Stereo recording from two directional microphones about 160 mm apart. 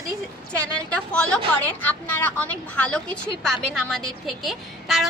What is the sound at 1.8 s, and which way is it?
A woman's voice, 10° left (ahead or behind).